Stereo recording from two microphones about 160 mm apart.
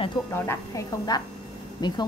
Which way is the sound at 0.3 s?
15° left (ahead or behind).